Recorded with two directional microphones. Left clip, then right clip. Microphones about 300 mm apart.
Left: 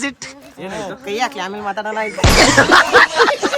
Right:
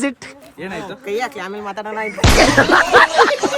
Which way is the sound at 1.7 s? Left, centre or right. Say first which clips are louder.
Left 3 dB; centre.